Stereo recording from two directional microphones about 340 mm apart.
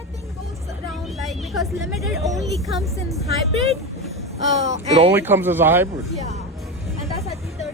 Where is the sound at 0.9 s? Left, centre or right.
Centre.